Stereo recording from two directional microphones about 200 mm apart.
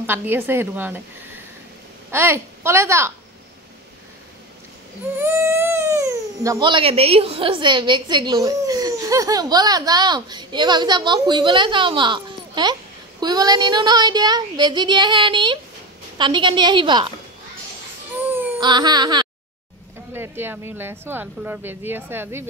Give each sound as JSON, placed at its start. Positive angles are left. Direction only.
{"t": 0.0, "sound": "speech", "side_deg": -10}
{"t": 2.0, "sound": "a woman's voice", "side_deg": -10}
{"t": 5.1, "sound": "speech", "side_deg": -10}
{"t": 18.6, "sound": "speech", "side_deg": -20}
{"t": 20.1, "sound": "speech", "side_deg": -10}